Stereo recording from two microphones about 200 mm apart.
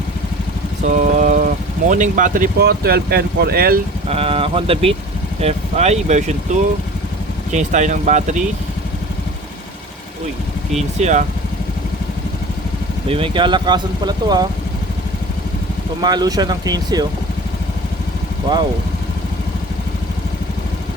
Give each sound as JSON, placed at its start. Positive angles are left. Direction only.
{"t": 0.9, "sound": "a sound", "side_deg": -40}
{"t": 1.9, "sound": "speech", "side_deg": -40}
{"t": 4.1, "sound": "speech", "side_deg": -30}
{"t": 11.0, "sound": "speech", "side_deg": -35}
{"t": 13.1, "sound": "speech", "side_deg": -25}
{"t": 16.0, "sound": "speech", "side_deg": -20}